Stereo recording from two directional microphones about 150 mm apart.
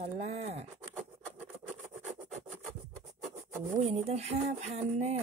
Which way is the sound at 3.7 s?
45° right (ahead or behind).